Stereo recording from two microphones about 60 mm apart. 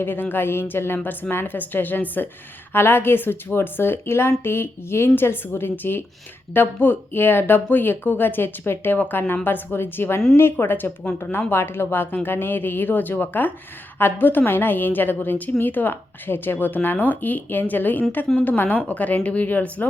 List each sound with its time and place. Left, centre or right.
0.0 s speech: left